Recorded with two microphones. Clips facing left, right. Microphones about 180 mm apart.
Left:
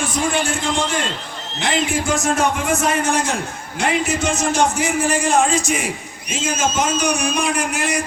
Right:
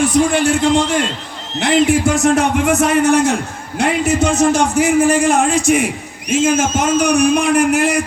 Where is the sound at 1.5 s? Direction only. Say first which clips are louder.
Right 8 dB; 60° right (ahead or behind).